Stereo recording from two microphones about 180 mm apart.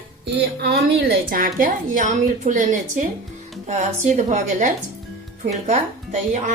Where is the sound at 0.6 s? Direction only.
65° right (ahead or behind); by 6.5 s 40° right (ahead or behind).